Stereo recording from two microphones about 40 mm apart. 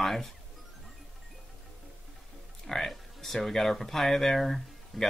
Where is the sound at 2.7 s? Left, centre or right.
Centre.